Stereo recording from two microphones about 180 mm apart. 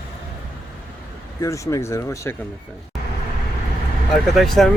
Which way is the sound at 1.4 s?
15° left (ahead or behind).